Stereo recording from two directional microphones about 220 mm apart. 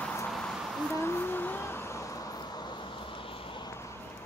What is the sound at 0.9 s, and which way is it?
Vehicle, 10° left (ahead or behind).